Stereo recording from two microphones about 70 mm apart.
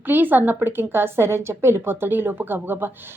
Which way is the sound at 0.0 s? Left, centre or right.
Right.